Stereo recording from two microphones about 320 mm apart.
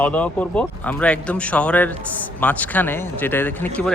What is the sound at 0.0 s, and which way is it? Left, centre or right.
Speech, centre.